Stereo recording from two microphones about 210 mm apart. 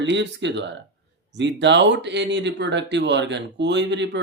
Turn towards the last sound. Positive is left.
turn(degrees=-55)  # may be behind; listen again after turning